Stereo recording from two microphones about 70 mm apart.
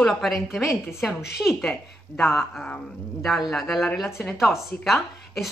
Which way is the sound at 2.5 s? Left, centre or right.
Centre.